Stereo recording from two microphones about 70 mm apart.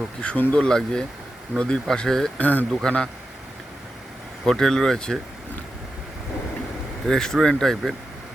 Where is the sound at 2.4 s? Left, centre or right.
Left.